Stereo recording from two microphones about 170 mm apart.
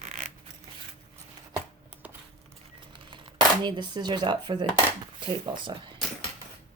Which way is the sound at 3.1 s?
30° right (ahead or behind).